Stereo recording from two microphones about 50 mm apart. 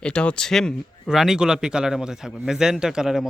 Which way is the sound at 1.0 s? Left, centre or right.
Centre.